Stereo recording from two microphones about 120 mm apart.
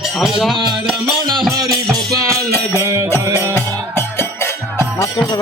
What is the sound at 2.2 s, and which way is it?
Music, 25° right (ahead or behind).